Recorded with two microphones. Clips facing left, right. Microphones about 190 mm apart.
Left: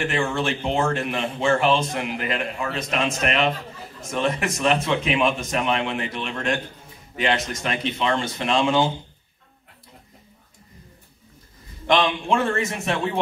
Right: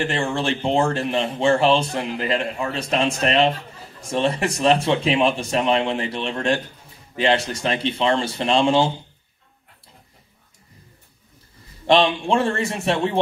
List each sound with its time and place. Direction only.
0.0 s speech: 30° right (ahead or behind)
11.8 s speech: 30° right (ahead or behind)